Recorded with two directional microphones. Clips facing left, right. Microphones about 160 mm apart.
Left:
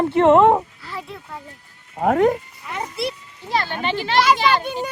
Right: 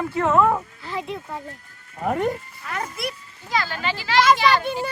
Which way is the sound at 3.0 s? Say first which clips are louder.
Left 4 dB; 30° left (ahead or behind).